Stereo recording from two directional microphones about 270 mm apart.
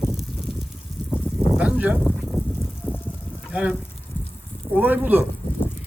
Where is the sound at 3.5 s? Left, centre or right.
Centre.